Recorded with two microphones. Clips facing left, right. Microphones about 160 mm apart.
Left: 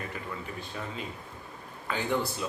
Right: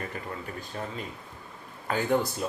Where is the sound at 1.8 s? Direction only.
45° right (ahead or behind).